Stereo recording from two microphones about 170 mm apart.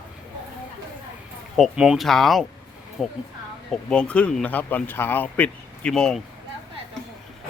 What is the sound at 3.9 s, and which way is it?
Speech, 5° left (ahead or behind).